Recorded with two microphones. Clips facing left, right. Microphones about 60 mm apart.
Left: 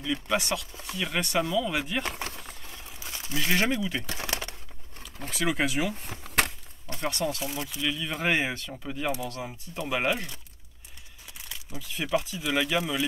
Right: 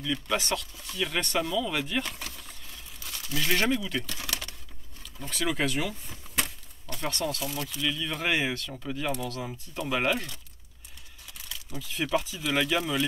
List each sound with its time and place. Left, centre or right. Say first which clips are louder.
0.0 s speech: left 1 dB; centre
0.4 s speech: even; centre
2.0 s speech: left 5 dB; left
2.4 s crumpling: left 3 dB; left
3.3 s speech: even; centre
4.1 s bird: left 3 dB; left
5.3 s speech: left 1 dB; centre
5.9 s a sound: left 5 dB; left
7.0 s speech: left 2 dB; centre
7.2 s speech: left 1 dB; centre
11.7 s speech: even; centre